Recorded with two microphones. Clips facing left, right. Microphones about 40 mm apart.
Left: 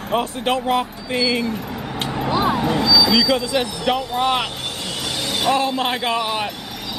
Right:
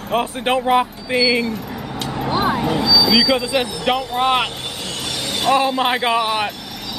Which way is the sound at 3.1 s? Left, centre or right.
Centre.